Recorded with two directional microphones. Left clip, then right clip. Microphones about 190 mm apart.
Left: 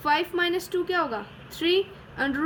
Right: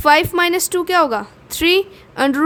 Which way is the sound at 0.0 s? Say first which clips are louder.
Right 11 dB; 60° right (ahead or behind).